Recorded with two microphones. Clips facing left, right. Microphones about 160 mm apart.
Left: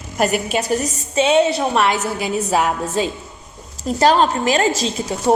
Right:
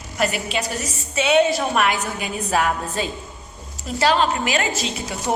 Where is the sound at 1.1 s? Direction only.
30° left (ahead or behind).